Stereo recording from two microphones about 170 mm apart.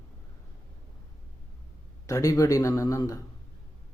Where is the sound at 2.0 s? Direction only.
20° left (ahead or behind).